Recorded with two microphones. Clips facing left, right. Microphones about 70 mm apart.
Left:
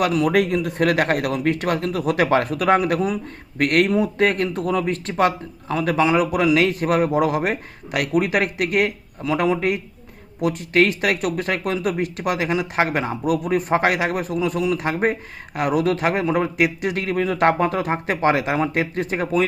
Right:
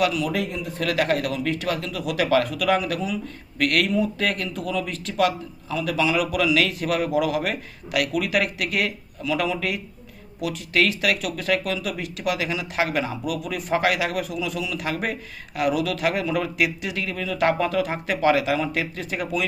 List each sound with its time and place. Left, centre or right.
0.0 s speech: left
0.8 s speech: left